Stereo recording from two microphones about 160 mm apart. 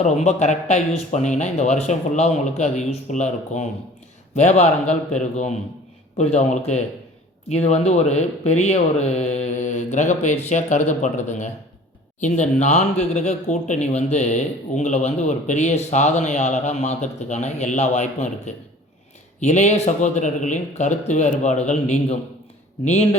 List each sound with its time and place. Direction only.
0.0 s speech: 45° left (ahead or behind)